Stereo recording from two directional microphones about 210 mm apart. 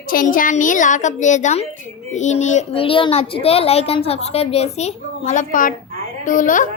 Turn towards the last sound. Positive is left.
turn(degrees=40)  # may be behind; listen again after turning